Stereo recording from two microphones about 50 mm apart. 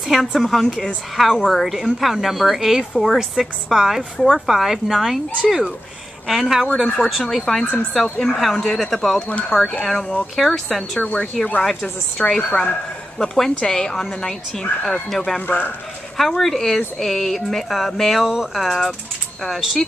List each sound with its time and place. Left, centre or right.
0.1 s a woman's voice: centre
11.0 s speech: left
12.2 s a woman's voice: centre
15.4 s speech: left
16.2 s speech: centre